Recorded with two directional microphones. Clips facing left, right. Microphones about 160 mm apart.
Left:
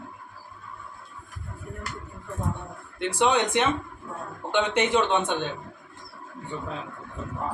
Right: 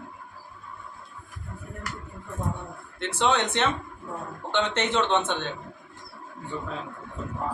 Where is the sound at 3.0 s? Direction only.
10° left (ahead or behind).